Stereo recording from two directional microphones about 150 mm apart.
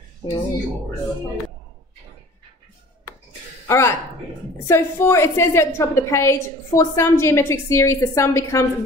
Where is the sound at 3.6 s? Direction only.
20° left (ahead or behind).